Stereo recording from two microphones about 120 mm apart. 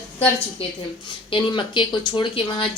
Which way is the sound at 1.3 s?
45° left (ahead or behind).